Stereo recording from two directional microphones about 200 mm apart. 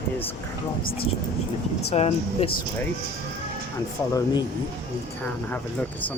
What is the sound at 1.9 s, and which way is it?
Speech, 30° left (ahead or behind).